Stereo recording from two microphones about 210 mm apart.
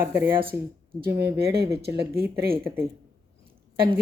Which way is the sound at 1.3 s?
50° right (ahead or behind).